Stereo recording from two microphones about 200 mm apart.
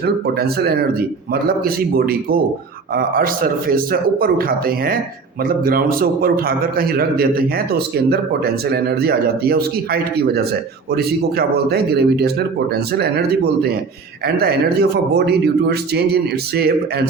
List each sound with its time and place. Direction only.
0.0 s a man's voice: 50° right (ahead or behind)